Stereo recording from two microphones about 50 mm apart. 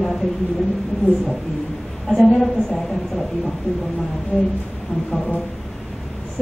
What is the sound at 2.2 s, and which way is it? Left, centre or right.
A woman's voice, centre.